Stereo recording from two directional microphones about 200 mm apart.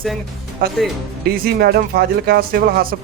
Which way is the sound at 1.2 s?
50° right (ahead or behind).